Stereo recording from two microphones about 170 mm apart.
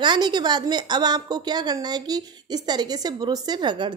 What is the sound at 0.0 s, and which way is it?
A woman's voice, 25° right (ahead or behind).